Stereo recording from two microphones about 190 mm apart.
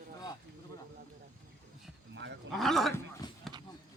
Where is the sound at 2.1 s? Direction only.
70° right (ahead or behind).